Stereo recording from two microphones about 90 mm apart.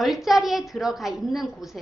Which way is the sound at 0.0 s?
Centre (ahead or behind).